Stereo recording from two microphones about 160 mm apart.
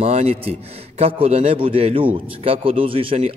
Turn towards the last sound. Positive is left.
turn(degrees=-35)  # may be behind; listen again after turning